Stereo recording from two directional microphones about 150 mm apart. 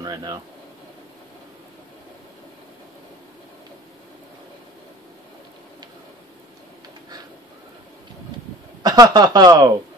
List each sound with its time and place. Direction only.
0.0 s speech: 25° right (ahead or behind)
8.8 s speech: 25° right (ahead or behind)